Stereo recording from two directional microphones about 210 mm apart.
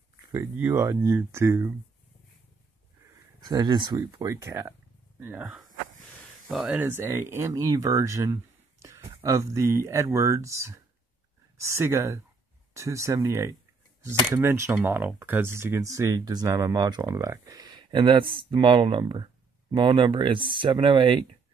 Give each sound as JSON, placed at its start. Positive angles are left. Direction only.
{"t": 0.3, "sound": "speech", "side_deg": -15}
{"t": 3.3, "sound": "speech", "side_deg": -20}